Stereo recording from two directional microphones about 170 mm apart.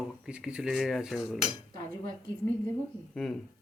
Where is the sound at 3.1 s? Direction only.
5° left (ahead or behind).